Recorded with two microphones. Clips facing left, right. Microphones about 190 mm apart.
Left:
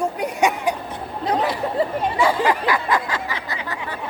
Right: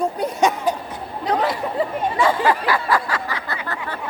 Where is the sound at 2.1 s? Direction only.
15° left (ahead or behind).